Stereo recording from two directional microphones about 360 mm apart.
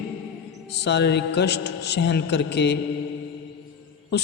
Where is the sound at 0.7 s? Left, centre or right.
Left.